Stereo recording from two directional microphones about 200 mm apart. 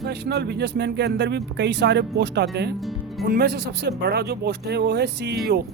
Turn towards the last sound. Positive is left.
turn(degrees=-55)  # may be behind; listen again after turning